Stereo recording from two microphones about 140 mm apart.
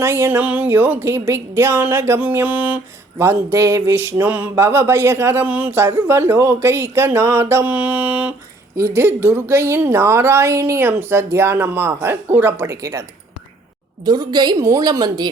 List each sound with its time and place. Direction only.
0.0 s a woman's voice: 20° right (ahead or behind)